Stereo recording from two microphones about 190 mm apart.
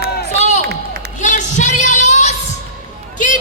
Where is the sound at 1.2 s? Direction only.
40° left (ahead or behind).